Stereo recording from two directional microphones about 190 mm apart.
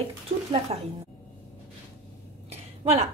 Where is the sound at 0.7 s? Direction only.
30° right (ahead or behind).